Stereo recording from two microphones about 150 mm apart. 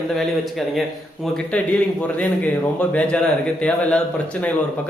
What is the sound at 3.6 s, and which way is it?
Speech, 10° left (ahead or behind).